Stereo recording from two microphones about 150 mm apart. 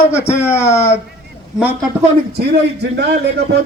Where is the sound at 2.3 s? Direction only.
90° right.